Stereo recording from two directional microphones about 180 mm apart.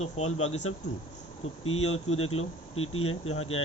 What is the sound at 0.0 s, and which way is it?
Speech, 35° left (ahead or behind).